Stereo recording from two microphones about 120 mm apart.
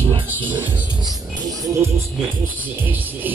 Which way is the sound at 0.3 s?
15° right (ahead or behind).